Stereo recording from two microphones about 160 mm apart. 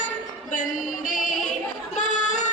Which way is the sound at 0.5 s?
55° left (ahead or behind).